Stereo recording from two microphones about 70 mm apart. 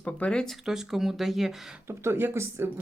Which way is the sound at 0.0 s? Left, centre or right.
Centre.